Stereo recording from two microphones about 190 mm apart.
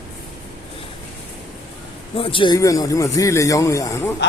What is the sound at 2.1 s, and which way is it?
A man's voice, 30° left (ahead or behind).